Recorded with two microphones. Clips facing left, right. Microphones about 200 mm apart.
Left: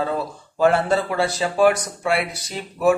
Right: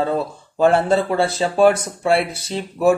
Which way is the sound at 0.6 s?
25° right (ahead or behind).